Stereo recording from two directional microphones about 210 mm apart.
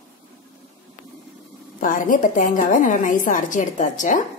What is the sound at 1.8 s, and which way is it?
A woman's voice, 40° left (ahead or behind).